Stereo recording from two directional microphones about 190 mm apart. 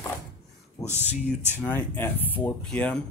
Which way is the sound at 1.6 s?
10° left (ahead or behind).